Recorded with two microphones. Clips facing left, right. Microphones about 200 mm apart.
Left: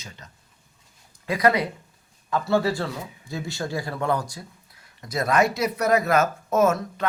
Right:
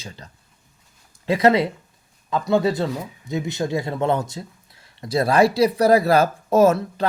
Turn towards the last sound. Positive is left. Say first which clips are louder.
# right 5 dB
turn(degrees=-30)  # may be behind; listen again after turning